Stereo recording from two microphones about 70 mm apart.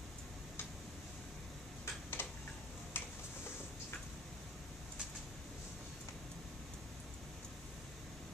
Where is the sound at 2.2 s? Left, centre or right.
Left.